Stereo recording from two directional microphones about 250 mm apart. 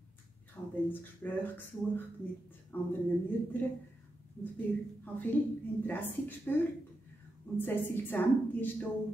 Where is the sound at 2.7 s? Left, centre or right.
Centre.